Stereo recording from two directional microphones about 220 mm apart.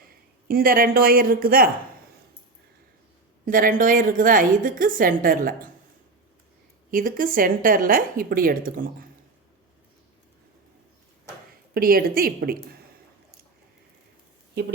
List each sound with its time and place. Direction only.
0.0 s speech: 40° right (ahead or behind)
3.4 s a woman's voice: 40° right (ahead or behind)
6.9 s a woman's voice: 40° right (ahead or behind)
11.7 s a woman's voice: 40° right (ahead or behind)